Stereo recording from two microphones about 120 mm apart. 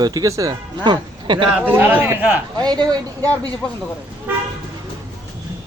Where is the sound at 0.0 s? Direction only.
30° right (ahead or behind).